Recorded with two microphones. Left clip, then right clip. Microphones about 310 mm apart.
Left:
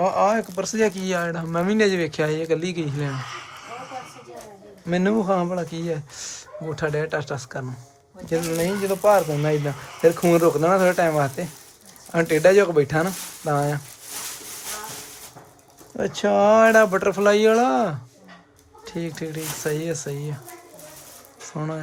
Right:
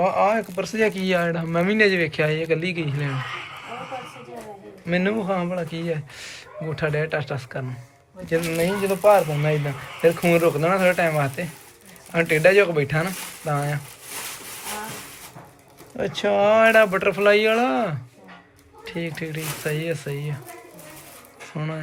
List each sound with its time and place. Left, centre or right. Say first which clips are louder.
0.0 s speech: even; centre
4.9 s speech: left 2 dB; centre
16.0 s speech: left 1 dB; centre
18.9 s speech: even; centre
21.5 s speech: left 2 dB; centre